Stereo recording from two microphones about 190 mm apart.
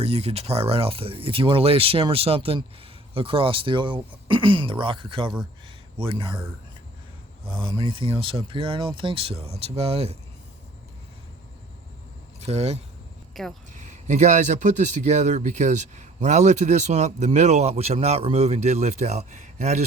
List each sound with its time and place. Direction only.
0.0 s speech: 30° right (ahead or behind)
7.5 s speech: 25° right (ahead or behind)
12.4 s speech: 35° right (ahead or behind)
13.3 s speech: centre (ahead or behind)
13.7 s speech: 40° right (ahead or behind)